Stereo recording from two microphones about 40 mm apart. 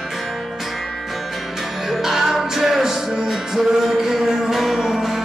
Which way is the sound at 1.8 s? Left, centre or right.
Centre.